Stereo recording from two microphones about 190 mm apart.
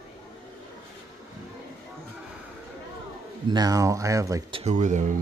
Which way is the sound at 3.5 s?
20° right (ahead or behind).